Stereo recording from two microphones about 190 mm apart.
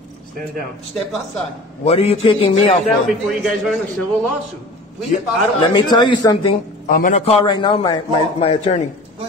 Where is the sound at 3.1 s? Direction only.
Centre (ahead or behind).